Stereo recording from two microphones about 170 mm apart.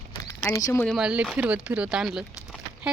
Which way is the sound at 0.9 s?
5° right (ahead or behind).